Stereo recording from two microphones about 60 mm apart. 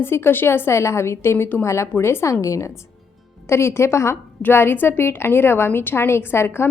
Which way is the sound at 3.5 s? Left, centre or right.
Left.